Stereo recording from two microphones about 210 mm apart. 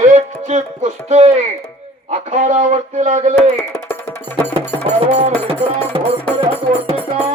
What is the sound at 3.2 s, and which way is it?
Speech, 25° right (ahead or behind).